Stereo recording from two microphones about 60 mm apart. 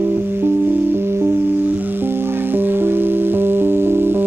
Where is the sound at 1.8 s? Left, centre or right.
Right.